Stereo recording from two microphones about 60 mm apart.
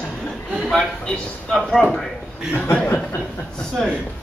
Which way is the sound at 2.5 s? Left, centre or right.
Left.